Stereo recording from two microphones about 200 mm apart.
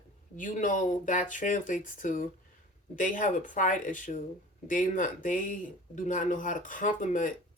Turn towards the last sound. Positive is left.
turn(degrees=40)  # may be behind; listen again after turning